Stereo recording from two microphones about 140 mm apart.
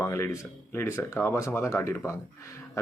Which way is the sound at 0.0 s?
20° left (ahead or behind).